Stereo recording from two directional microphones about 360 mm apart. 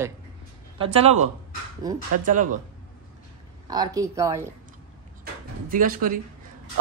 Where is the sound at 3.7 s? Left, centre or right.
Centre.